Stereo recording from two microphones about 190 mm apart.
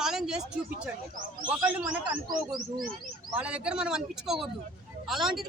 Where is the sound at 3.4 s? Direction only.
5° right (ahead or behind).